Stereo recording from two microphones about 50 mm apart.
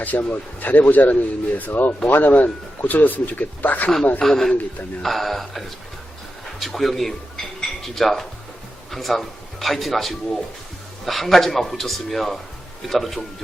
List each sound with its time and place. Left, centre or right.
0.0 s speech: left
4.2 s a man's voice: centre
7.6 s dishes: centre
8.9 s a man's voice: centre